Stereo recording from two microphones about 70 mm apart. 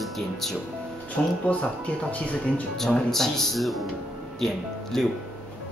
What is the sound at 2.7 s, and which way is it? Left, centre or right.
Speech, centre.